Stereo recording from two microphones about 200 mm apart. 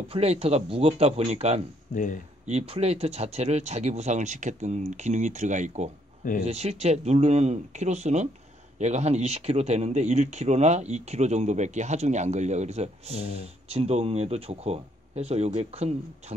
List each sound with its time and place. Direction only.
0.1 s speech: 30° right (ahead or behind)